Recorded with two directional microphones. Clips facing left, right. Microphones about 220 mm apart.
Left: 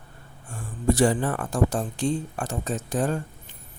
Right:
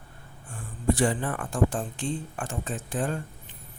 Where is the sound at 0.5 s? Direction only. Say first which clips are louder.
Left 3 dB; 40° left (ahead or behind).